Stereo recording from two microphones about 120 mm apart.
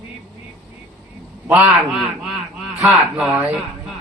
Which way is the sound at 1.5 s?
10° right (ahead or behind).